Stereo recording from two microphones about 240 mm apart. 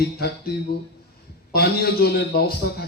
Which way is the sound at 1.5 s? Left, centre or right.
Left.